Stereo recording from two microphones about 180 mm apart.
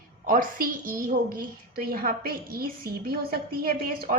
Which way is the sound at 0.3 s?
50° right (ahead or behind).